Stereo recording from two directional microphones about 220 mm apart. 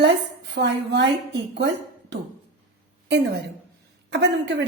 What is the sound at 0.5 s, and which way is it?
A woman's voice, 50° right (ahead or behind).